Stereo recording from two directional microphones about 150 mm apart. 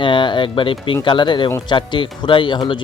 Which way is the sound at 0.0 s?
30° left (ahead or behind).